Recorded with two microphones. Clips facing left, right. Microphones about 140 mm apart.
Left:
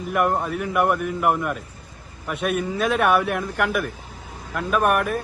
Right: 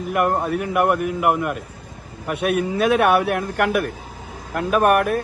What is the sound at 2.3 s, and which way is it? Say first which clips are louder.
A man's voice: right 3 dB; 55° right (ahead or behind).